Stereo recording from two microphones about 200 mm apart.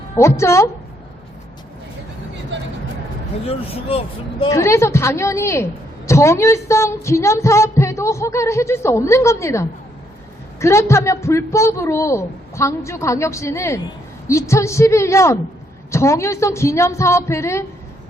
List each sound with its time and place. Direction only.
0.2 s music: 15° left (ahead or behind)
3.4 s speech: 30° left (ahead or behind)
4.5 s music: 15° left (ahead or behind)